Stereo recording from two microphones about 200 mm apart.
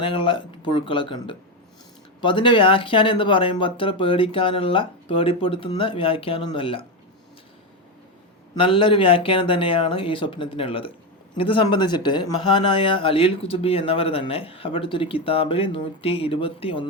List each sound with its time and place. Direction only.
0.0 s speech: 25° left (ahead or behind)
8.5 s speech: 25° left (ahead or behind)